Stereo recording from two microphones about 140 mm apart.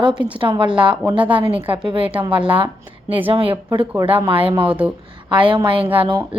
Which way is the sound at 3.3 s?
40° right (ahead or behind).